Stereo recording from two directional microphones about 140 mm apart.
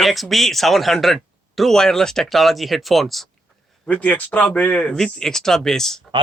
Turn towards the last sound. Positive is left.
turn(degrees=5)  # may be behind; listen again after turning